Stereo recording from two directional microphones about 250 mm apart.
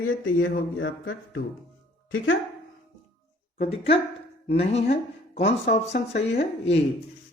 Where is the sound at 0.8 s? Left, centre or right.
Left.